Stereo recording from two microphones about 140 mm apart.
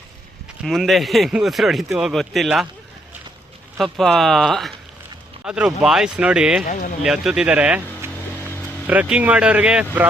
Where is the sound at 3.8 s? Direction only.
Centre (ahead or behind).